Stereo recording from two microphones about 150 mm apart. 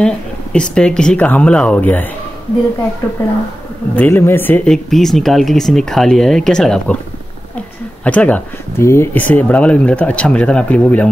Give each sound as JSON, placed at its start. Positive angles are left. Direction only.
{"t": 0.0, "sound": "speech", "side_deg": 5}
{"t": 3.9, "sound": "speech", "side_deg": 15}
{"t": 4.8, "sound": "speech", "side_deg": 0}
{"t": 8.0, "sound": "speech", "side_deg": 10}